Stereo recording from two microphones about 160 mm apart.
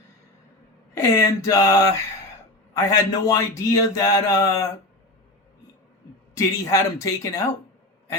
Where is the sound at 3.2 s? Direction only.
20° left (ahead or behind).